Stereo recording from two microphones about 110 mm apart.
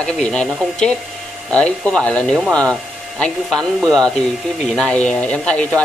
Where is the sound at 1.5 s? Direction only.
10° left (ahead or behind).